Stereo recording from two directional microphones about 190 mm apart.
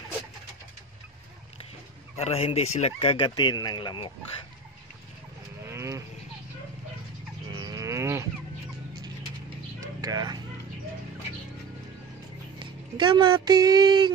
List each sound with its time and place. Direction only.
2.1 s speech: 35° left (ahead or behind)
5.7 s livestock: 15° right (ahead or behind)
7.5 s livestock: 20° right (ahead or behind)
10.0 s speech: 20° right (ahead or behind)
12.5 s speech: 25° right (ahead or behind)